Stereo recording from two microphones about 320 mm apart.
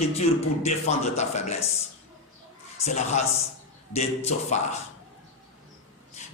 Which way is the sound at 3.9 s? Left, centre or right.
Centre.